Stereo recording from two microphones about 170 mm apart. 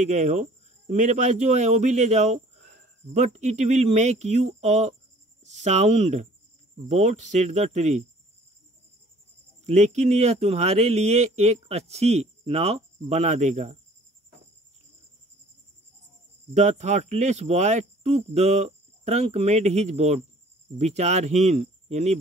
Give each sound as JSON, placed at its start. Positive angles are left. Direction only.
{"t": 0.0, "sound": "speech", "side_deg": -45}
{"t": 9.7, "sound": "speech", "side_deg": -40}
{"t": 16.5, "sound": "speech", "side_deg": -45}